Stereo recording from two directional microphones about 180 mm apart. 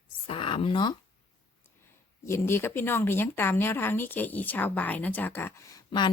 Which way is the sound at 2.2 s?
15° left (ahead or behind).